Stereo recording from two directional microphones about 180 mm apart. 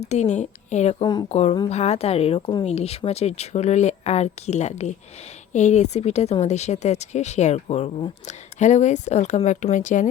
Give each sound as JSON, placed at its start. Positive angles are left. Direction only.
{"t": 0.1, "sound": "speech", "side_deg": 40}